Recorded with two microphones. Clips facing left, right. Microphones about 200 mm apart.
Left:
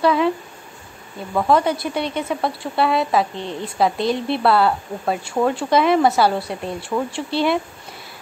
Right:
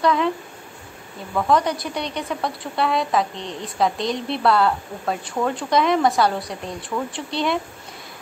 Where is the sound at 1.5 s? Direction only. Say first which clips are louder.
Left 2 dB; 5° left (ahead or behind).